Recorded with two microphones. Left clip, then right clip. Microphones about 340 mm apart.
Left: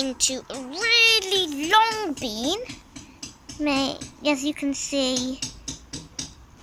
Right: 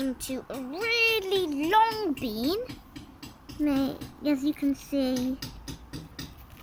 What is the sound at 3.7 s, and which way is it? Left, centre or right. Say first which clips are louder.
Speech: left 5 dB; centre.